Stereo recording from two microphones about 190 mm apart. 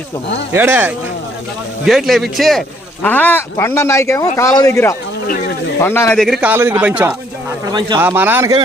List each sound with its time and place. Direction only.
0.5 s a man's voice: 10° right (ahead or behind); by 6.1 s 10° left (ahead or behind)
6.1 s a man's voice: centre (ahead or behind)
7.7 s speech: 20° right (ahead or behind)
7.9 s a man's voice: 10° right (ahead or behind)